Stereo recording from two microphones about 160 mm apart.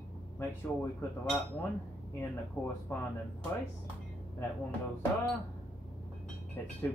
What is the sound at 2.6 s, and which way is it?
Speech, 10° left (ahead or behind).